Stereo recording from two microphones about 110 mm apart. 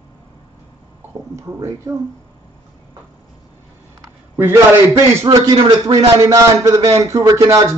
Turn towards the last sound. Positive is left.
turn(degrees=-30)  # may be behind; listen again after turning